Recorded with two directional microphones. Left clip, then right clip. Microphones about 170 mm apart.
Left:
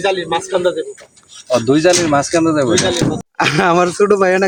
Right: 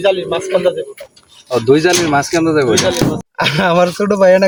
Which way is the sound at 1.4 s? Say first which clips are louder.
Right 1 dB; 15° left (ahead or behind).